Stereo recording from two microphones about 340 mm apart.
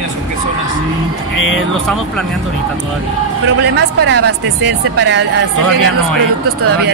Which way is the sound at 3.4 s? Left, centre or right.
Right.